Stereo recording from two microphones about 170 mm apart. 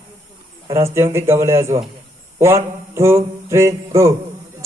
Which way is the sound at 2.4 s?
15° right (ahead or behind).